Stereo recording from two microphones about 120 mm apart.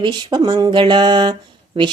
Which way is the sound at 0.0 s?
35° right (ahead or behind).